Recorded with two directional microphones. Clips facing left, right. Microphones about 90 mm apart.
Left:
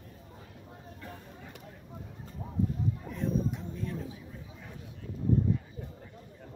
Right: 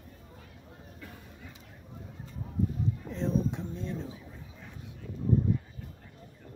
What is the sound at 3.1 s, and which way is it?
Speech, 30° right (ahead or behind).